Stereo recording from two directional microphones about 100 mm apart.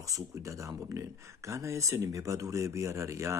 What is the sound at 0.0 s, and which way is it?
Speech, 35° right (ahead or behind).